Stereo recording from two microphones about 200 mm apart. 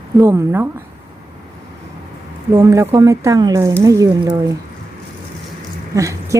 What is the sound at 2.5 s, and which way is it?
Speech, 15° right (ahead or behind).